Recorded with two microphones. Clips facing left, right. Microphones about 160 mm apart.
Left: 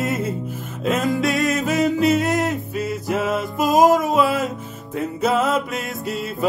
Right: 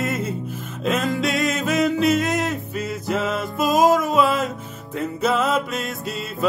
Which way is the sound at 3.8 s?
45° left (ahead or behind).